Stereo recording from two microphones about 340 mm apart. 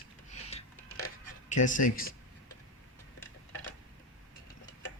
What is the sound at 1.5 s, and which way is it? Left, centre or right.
Speech, left.